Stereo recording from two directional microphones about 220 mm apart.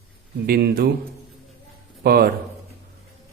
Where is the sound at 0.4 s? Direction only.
45° right (ahead or behind).